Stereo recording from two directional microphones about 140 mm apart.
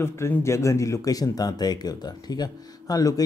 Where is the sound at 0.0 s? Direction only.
20° left (ahead or behind).